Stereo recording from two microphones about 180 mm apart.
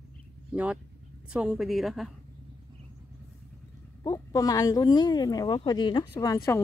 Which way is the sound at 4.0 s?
20° left (ahead or behind).